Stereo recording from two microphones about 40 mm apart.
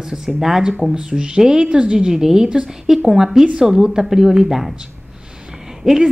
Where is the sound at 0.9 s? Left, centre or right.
Right.